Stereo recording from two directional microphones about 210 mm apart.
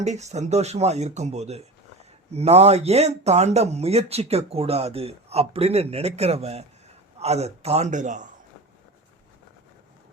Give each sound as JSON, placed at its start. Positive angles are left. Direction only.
{"t": 0.0, "sound": "speech", "side_deg": -35}